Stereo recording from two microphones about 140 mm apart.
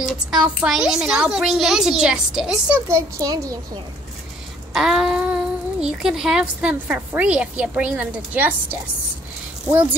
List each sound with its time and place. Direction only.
0.3 s a child's voice: 5° right (ahead or behind)
2.9 s a child's voice: 25° right (ahead or behind)
4.7 s speech: 5° right (ahead or behind)